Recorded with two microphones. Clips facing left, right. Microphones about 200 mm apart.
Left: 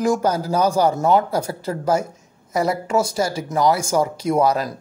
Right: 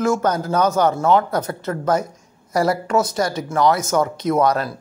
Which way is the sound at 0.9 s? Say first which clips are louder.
Even; 10° left (ahead or behind).